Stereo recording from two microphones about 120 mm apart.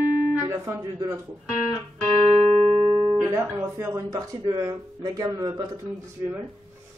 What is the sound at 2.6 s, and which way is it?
Music, 65° right (ahead or behind).